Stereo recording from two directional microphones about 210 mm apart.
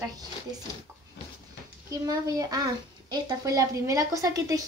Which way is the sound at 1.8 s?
15° right (ahead or behind).